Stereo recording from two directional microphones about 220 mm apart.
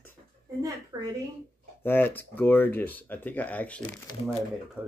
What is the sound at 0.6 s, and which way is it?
Speech, 15° right (ahead or behind).